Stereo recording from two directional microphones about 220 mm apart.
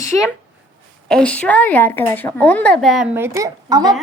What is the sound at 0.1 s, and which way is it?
A woman's voice, 5° left (ahead or behind).